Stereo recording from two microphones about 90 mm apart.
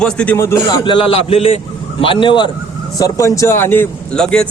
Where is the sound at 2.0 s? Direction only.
75° left (ahead or behind).